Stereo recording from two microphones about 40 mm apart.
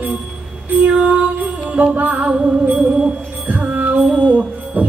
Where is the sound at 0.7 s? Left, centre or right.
Right.